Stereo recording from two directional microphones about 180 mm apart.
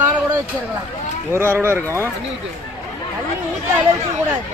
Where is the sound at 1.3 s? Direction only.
15° right (ahead or behind).